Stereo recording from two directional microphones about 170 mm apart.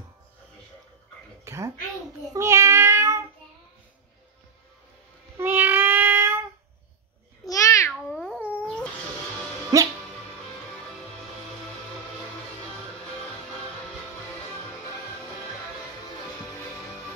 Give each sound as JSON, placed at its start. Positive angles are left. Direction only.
{"t": 1.4, "sound": "a sound", "side_deg": -15}
{"t": 2.3, "sound": "child singing", "side_deg": -15}
{"t": 5.4, "sound": "child singing", "side_deg": -10}
{"t": 7.4, "sound": "babbling", "side_deg": 20}
{"t": 7.9, "sound": "cat", "side_deg": 5}
{"t": 9.7, "sound": "music", "side_deg": -20}